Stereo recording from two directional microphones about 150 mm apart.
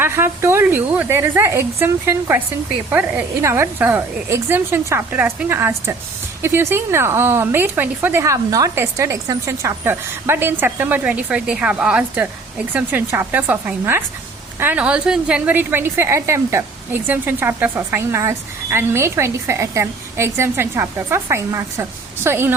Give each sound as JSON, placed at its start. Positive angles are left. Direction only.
{"t": 0.0, "sound": "a woman's voice", "side_deg": -15}